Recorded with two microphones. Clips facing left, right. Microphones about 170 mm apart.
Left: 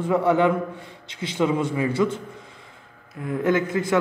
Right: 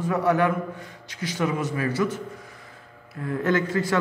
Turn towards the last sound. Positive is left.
turn(degrees=10)  # may be behind; listen again after turning